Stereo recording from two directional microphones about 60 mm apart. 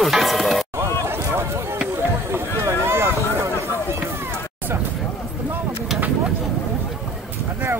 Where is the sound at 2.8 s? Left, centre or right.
Right.